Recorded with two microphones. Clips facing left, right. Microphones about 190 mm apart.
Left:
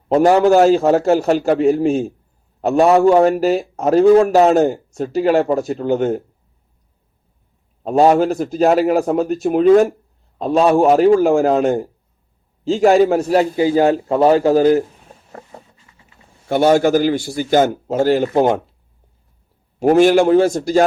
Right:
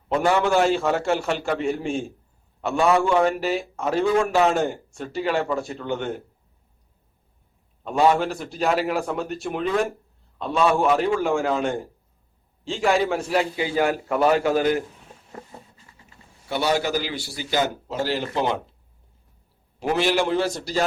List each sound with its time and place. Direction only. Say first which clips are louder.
0.1 s a man's voice: left 9 dB; 40° left (ahead or behind)
7.9 s a man's voice: left 7 dB; 40° left (ahead or behind)
16.5 s a man's voice: left 10 dB; 50° left (ahead or behind)
19.8 s a man's voice: left 11 dB; 45° left (ahead or behind)